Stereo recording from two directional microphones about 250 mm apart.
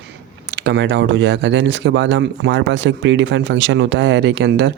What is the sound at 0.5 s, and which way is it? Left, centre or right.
Speech, right.